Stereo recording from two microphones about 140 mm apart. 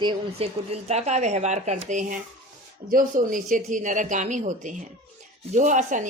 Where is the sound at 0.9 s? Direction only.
50° right (ahead or behind).